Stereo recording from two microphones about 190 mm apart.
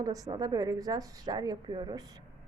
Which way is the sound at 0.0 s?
20° right (ahead or behind).